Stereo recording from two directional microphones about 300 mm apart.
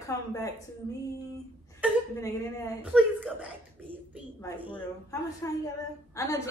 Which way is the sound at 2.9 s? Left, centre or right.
Centre.